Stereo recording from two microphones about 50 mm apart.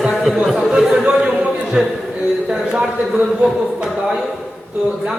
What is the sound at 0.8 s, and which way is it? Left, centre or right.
Speech, centre.